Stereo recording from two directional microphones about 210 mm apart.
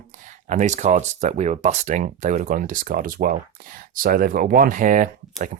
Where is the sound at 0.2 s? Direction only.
35° right (ahead or behind).